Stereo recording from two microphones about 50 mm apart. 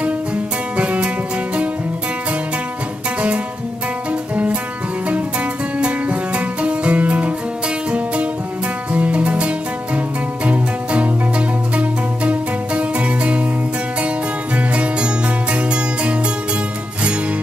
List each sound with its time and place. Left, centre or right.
0.7 s music: right
4.1 s music: right
5.8 s music: right
8.9 s music: right